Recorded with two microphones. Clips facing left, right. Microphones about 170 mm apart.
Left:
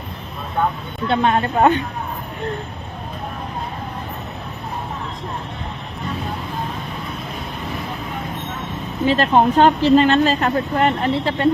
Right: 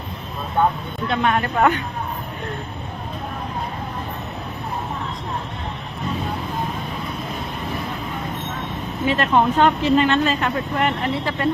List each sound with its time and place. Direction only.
1.0 s speech: 30° left (ahead or behind)
9.0 s speech: 30° left (ahead or behind)